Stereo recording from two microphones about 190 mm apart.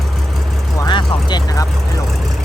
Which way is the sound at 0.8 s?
25° left (ahead or behind).